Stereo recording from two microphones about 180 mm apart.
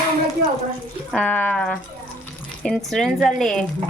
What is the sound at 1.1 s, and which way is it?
A woman's voice, 5° left (ahead or behind).